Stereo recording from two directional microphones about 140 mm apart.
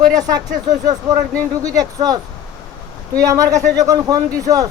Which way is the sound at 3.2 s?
25° right (ahead or behind).